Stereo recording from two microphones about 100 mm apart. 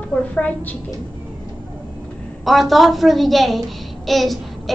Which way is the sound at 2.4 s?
Centre (ahead or behind).